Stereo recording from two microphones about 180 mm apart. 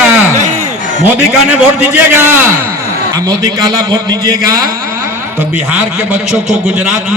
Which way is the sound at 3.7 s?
20° right (ahead or behind).